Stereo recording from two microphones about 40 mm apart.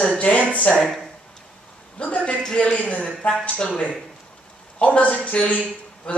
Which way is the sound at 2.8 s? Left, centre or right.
Left.